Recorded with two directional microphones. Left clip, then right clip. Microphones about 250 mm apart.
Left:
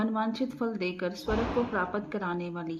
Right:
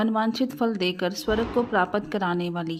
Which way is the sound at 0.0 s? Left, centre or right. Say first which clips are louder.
Right 6 dB; right.